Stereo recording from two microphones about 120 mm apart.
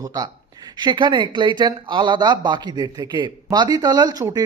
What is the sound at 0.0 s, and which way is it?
A man's voice, 30° right (ahead or behind).